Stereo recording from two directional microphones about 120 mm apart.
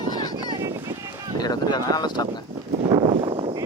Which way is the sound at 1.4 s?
35° left (ahead or behind).